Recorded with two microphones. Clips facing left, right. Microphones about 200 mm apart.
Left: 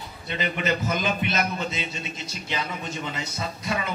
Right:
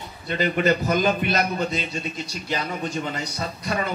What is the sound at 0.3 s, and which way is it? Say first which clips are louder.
A man's voice: right 6 dB; 45° right (ahead or behind).